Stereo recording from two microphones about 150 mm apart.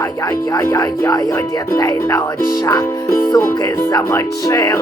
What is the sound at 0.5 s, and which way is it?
Speech, 25° left (ahead or behind).